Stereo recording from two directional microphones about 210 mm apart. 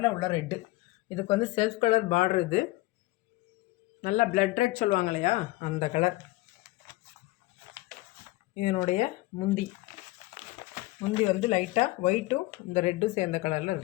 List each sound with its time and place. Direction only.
0.0 s speech: 20° left (ahead or behind); by 2.6 s 40° left (ahead or behind)
4.0 s speech: 40° left (ahead or behind)
8.5 s speech: 35° left (ahead or behind)
11.1 s speech: 25° left (ahead or behind)